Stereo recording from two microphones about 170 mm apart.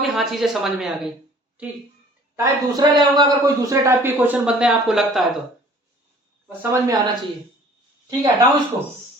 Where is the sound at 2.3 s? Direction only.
20° right (ahead or behind); by 5.3 s centre (ahead or behind).